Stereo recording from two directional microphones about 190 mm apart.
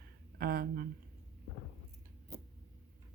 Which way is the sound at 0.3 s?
50° right (ahead or behind).